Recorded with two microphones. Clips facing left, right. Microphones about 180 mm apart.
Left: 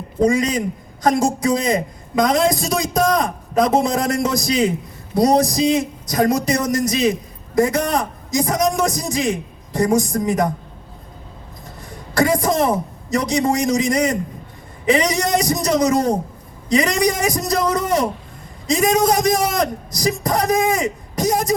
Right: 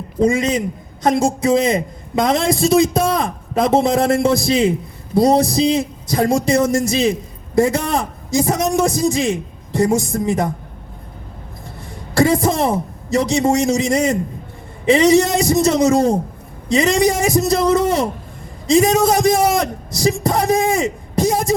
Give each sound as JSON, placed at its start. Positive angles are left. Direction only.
{"t": 0.3, "sound": "a man's voice", "side_deg": -25}
{"t": 12.1, "sound": "a man's voice", "side_deg": -25}
{"t": 19.4, "sound": "a man's voice", "side_deg": -5}
{"t": 19.9, "sound": "a man's voice", "side_deg": -25}